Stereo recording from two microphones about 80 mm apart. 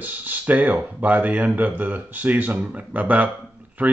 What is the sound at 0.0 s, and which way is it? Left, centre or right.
Speech, right.